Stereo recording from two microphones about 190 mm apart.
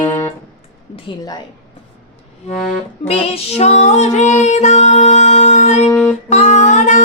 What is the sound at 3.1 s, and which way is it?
Music, 35° left (ahead or behind).